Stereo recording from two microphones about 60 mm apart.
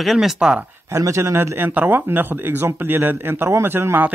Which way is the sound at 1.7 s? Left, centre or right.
Right.